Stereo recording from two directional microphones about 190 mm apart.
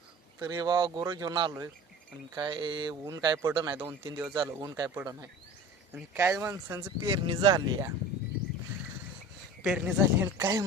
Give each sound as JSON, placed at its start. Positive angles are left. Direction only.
{"t": 0.3, "sound": "speech", "side_deg": -20}
{"t": 9.6, "sound": "speech", "side_deg": -5}
{"t": 10.3, "sound": "speech", "side_deg": -15}